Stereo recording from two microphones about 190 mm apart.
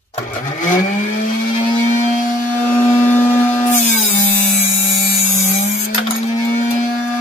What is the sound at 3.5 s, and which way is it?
Tools, 40° left (ahead or behind).